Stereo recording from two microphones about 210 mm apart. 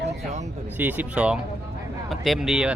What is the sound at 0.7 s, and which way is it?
Speech, 10° right (ahead or behind).